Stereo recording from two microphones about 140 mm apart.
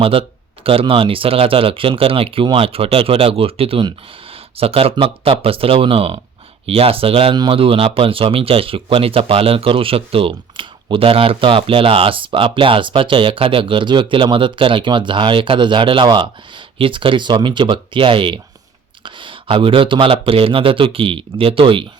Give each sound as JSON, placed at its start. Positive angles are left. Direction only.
{"t": 0.0, "sound": "speech", "side_deg": -40}